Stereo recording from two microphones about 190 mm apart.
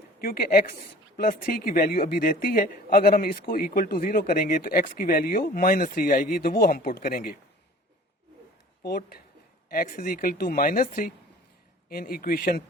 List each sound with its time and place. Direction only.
0.2 s a man's voice: 50° left (ahead or behind)
8.8 s a man's voice: 55° left (ahead or behind)